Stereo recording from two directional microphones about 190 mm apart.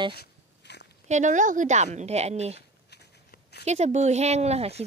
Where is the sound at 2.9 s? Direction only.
60° left (ahead or behind).